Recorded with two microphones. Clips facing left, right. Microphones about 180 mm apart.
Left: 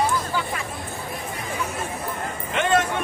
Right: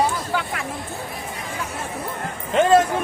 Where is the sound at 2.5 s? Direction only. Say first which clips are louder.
Right 7 dB; 35° right (ahead or behind).